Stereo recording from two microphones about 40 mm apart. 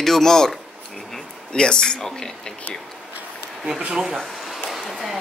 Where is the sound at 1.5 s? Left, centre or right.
Left.